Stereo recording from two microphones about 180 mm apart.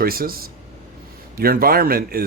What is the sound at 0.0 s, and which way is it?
Speech, 55° right (ahead or behind).